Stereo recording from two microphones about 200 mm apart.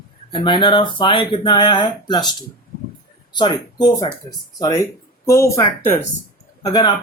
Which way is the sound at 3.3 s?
20° left (ahead or behind).